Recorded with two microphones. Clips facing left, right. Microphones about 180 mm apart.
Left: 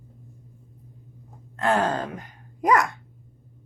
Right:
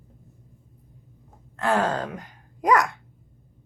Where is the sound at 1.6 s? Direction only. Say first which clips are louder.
Even; 20° left (ahead or behind).